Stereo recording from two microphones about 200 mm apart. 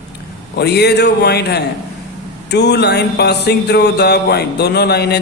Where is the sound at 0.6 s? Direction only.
55° left (ahead or behind).